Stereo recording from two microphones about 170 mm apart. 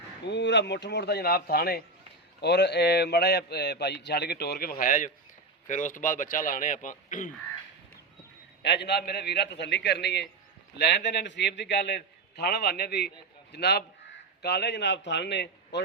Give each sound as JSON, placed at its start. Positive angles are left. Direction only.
{"t": 0.3, "sound": "a man's voice", "side_deg": 90}
{"t": 2.4, "sound": "a man's voice", "side_deg": 75}
{"t": 8.6, "sound": "a man's voice", "side_deg": 90}